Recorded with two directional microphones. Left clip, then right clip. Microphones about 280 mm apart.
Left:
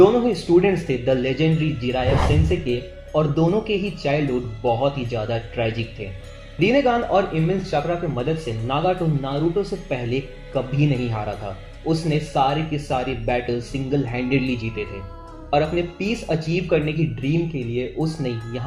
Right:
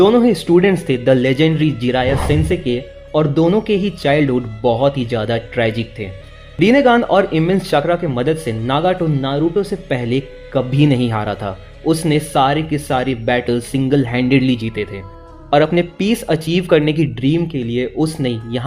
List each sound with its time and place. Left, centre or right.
0.0 s a man's voice: right
2.0 s speech: centre
2.6 s a man's voice: right